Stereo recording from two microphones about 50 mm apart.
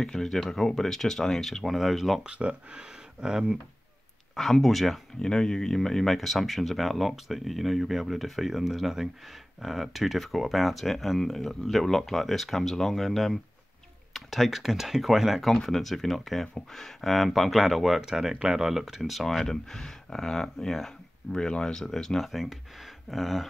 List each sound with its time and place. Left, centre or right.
0.0 s speech: centre
2.2 s speech: right
4.4 s speech: centre
5.2 s speech: centre